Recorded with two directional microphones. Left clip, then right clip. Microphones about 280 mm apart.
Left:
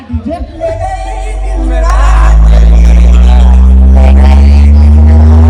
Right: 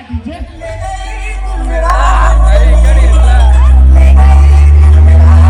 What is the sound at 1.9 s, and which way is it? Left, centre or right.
Music, right.